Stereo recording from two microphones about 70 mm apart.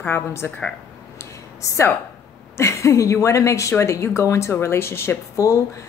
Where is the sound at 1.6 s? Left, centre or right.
Left.